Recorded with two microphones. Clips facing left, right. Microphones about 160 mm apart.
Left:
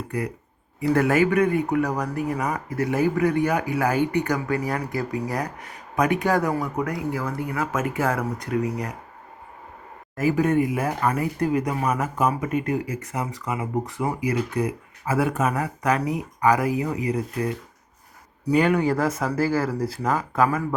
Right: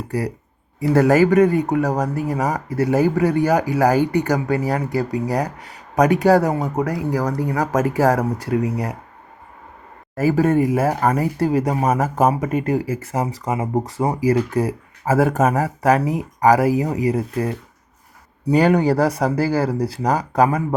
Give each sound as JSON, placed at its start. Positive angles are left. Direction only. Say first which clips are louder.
{"t": 0.1, "sound": "speech", "louder": "right 7 dB", "side_deg": -35}
{"t": 10.2, "sound": "speech", "louder": "right 4 dB", "side_deg": -40}